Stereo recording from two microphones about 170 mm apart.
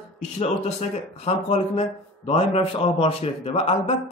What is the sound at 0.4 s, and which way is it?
A man's voice, 40° left (ahead or behind).